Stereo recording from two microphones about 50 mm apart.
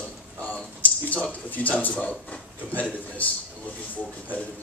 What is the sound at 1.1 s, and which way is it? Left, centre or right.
A man's voice, left.